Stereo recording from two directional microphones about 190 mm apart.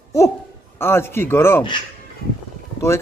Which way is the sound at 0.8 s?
10° left (ahead or behind).